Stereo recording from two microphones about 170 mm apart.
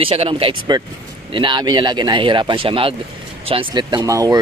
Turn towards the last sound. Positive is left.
turn(degrees=-20)  # may be behind; listen again after turning